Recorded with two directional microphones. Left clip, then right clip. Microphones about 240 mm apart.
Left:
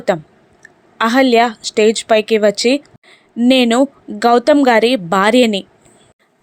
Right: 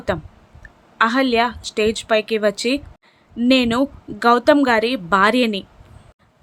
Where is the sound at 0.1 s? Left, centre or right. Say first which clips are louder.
Left 5 dB; centre.